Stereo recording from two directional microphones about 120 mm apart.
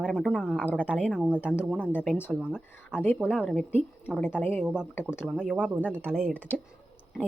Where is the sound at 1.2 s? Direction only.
10° right (ahead or behind).